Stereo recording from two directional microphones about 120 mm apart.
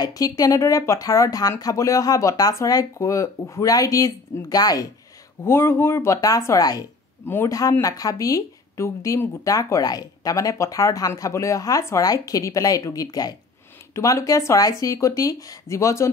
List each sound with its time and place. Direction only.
0.0 s speech: 30° left (ahead or behind)
5.4 s speech: 20° left (ahead or behind)